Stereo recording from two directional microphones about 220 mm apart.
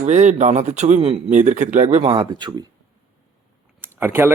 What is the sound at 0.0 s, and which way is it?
Speech, 30° right (ahead or behind).